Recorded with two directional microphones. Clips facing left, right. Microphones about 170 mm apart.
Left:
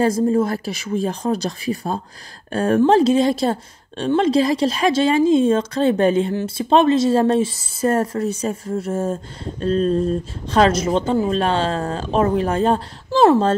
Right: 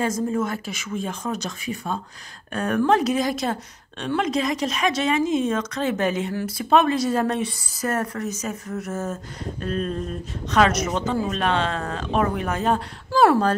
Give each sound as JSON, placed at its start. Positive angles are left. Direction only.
{"t": 0.0, "sound": "speech", "side_deg": 35}